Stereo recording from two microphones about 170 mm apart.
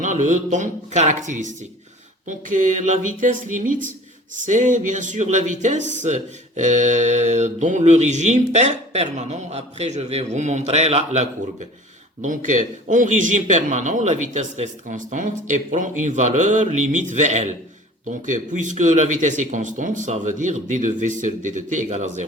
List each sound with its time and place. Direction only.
0.0 s a man's voice: 45° right (ahead or behind)